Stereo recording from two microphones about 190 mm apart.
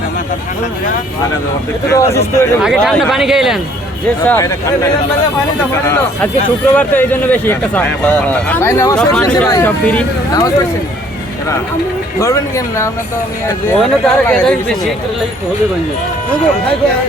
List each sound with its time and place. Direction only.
1.9 s a man's voice: 15° left (ahead or behind)
2.6 s speech: centre (ahead or behind)
4.3 s a man's voice: 15° left (ahead or behind)
6.7 s a man's voice: 10° left (ahead or behind)
9.0 s a man's voice: 5° left (ahead or behind)
12.2 s a man's voice: 15° left (ahead or behind)
13.7 s speech: 5° left (ahead or behind)